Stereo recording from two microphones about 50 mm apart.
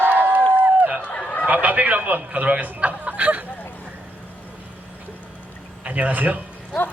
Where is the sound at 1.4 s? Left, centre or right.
Right.